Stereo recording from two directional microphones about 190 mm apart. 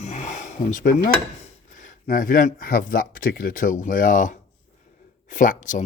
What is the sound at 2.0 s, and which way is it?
Speech, 45° left (ahead or behind).